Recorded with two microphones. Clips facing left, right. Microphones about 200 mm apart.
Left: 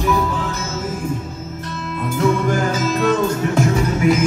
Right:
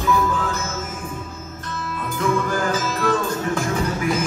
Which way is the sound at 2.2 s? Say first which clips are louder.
Left 4 dB; 25° left (ahead or behind).